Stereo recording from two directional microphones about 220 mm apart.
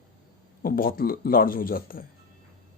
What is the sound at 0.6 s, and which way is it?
Speech, 40° left (ahead or behind).